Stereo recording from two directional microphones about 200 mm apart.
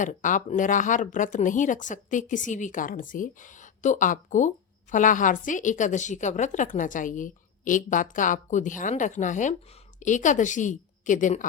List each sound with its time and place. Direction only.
0.0 s a woman's voice: 40° left (ahead or behind)